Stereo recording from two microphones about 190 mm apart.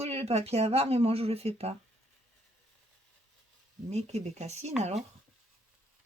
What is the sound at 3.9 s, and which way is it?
Speech, 35° right (ahead or behind).